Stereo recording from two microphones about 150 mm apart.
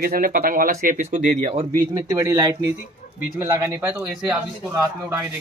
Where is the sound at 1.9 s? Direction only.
20° right (ahead or behind).